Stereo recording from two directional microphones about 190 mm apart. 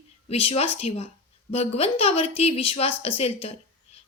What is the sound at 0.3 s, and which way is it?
A woman's voice, 30° left (ahead or behind).